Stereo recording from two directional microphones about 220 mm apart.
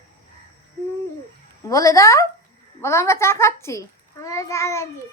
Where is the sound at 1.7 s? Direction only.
15° left (ahead or behind).